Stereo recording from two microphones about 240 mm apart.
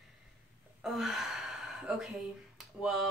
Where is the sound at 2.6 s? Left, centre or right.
Centre.